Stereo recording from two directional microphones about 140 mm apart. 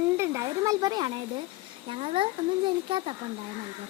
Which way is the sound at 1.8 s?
45° right (ahead or behind).